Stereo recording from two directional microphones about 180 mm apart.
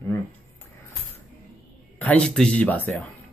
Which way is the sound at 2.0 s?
5° left (ahead or behind).